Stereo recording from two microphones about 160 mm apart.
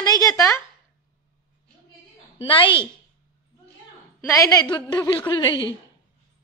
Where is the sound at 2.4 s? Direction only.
30° left (ahead or behind).